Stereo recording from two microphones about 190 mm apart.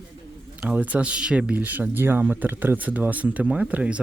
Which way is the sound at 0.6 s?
10° right (ahead or behind).